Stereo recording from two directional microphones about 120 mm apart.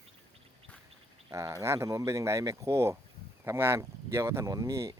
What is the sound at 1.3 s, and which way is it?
Speech, 25° right (ahead or behind).